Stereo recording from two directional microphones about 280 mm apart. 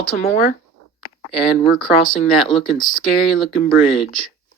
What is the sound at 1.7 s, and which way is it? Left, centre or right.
Speech, centre.